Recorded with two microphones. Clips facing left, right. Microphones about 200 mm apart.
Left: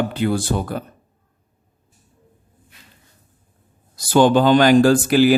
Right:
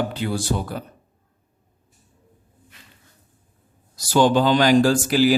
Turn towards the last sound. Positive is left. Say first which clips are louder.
# left 4 dB
turn(degrees=55)  # may be behind; listen again after turning